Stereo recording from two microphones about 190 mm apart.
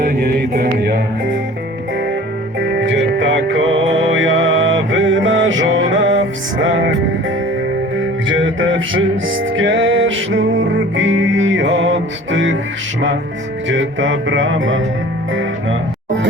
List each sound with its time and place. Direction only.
0.0 s music: 55° right (ahead or behind)
2.6 s music: 70° right (ahead or behind); by 7.0 s 90° right
8.4 s music: 90° right
13.7 s music: 75° right (ahead or behind)